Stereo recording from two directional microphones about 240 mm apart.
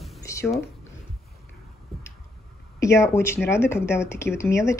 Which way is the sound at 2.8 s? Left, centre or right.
Centre.